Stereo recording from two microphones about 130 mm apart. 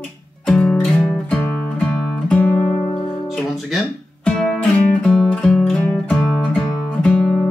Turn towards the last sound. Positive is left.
turn(degrees=0)  # may be behind; listen again after turning